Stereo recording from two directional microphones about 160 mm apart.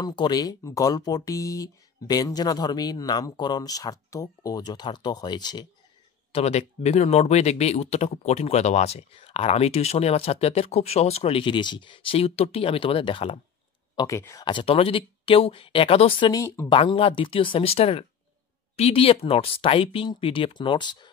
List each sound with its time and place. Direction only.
0.0 s speech: 25° left (ahead or behind)
6.3 s speech: 40° left (ahead or behind)
13.9 s speech: 20° left (ahead or behind)
16.6 s speech: 35° left (ahead or behind)